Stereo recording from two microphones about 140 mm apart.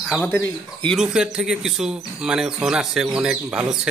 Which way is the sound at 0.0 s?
5° left (ahead or behind).